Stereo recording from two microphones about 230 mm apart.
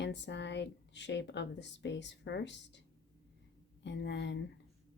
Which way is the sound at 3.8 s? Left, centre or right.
Left.